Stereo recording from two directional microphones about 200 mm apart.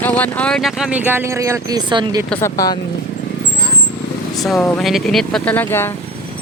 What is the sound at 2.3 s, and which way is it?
Speech, 15° left (ahead or behind).